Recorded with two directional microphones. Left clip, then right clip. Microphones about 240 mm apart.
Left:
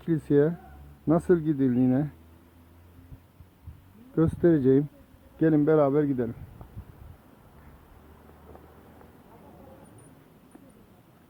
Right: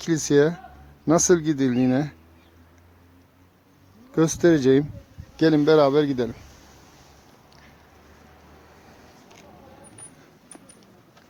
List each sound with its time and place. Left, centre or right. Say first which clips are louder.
0.0 s speech: right 4 dB; centre
4.1 s speech: right 4 dB; centre